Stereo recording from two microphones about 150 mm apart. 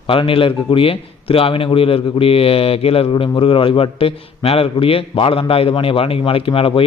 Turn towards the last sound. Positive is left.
turn(degrees=35)  # may be behind; listen again after turning